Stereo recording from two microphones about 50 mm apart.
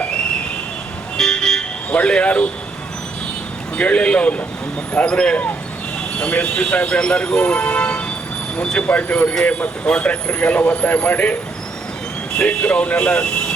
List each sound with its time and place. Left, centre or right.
1.1 s vehicle: centre
2.0 s speech: left
3.8 s speech: left
8.9 s speech: left
12.5 s speech: left